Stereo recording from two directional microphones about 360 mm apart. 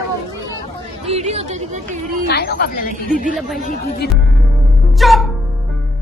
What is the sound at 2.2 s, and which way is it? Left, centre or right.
Speech, left.